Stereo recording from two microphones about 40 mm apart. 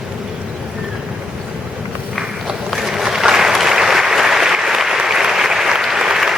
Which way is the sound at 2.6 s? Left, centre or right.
Centre.